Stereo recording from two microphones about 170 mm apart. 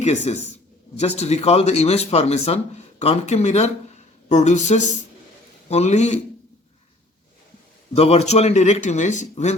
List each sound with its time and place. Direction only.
0.0 s a man's voice: 40° left (ahead or behind)
7.9 s a man's voice: 35° left (ahead or behind)